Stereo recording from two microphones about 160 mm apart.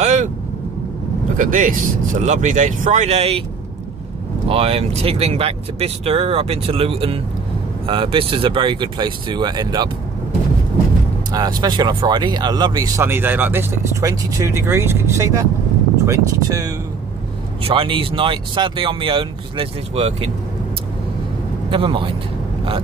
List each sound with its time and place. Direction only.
0.0 s vehicle: 50° right (ahead or behind)
1.3 s speech: 55° right (ahead or behind); by 3.4 s 40° right (ahead or behind)
4.5 s speech: 35° right (ahead or behind)
11.3 s speech: 25° right (ahead or behind)
17.6 s speech: 35° right (ahead or behind)
21.6 s speech: 30° right (ahead or behind)